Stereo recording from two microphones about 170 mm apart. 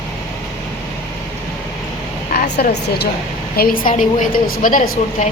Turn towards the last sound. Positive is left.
turn(degrees=50)  # may be behind; listen again after turning